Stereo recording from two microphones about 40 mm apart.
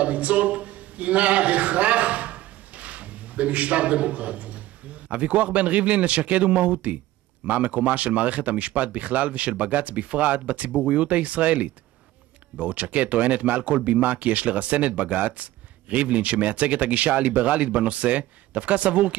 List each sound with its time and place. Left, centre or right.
0.0 s a man's voice: right